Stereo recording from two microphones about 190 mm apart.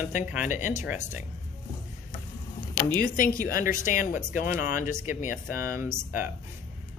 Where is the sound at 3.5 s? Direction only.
45° left (ahead or behind).